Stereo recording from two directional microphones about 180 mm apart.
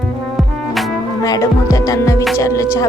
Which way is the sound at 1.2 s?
20° left (ahead or behind).